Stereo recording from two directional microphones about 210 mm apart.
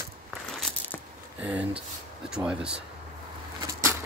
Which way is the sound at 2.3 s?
5° right (ahead or behind).